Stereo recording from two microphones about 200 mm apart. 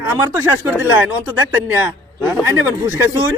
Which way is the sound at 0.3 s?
15° right (ahead or behind).